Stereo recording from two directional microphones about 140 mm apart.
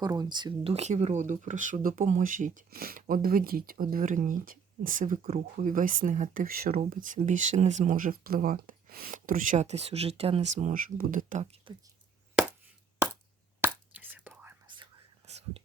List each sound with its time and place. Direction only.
0.0 s speech: 30° right (ahead or behind)
0.7 s speech: 50° right (ahead or behind)
10.5 s speech: 60° right (ahead or behind)
11.7 s speech: 35° right (ahead or behind)
13.6 s whispering: 15° right (ahead or behind)
15.3 s whispering: 50° right (ahead or behind)